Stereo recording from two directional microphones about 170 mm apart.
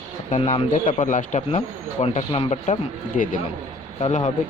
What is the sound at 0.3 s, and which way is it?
Speech, 45° left (ahead or behind).